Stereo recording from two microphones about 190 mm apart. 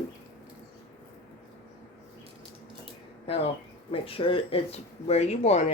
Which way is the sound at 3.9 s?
30° left (ahead or behind).